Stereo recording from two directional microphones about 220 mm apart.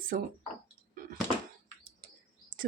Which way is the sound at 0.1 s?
35° right (ahead or behind).